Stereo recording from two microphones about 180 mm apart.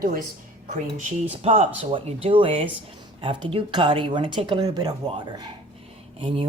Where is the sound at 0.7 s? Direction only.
40° right (ahead or behind).